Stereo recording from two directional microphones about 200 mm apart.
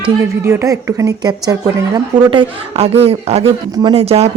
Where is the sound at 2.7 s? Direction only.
30° right (ahead or behind).